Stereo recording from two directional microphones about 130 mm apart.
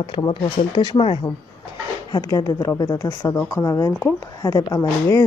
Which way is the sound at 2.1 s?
25° left (ahead or behind).